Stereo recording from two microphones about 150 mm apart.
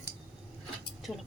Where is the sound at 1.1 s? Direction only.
10° left (ahead or behind).